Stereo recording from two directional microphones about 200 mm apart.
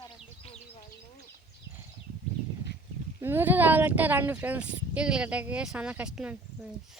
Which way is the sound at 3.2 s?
10° right (ahead or behind).